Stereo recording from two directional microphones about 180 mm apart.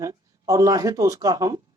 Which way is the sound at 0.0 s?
20° right (ahead or behind).